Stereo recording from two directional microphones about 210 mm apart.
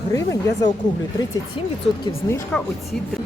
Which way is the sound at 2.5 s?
Centre (ahead or behind).